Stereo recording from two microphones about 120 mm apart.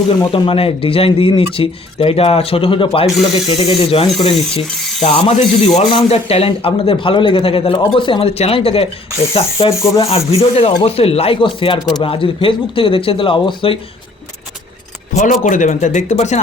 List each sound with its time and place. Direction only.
0.3 s speech: 50° left (ahead or behind)
12.0 s speech: 50° left (ahead or behind)
15.1 s speech: 90° left; by 16.4 s 70° left (ahead or behind)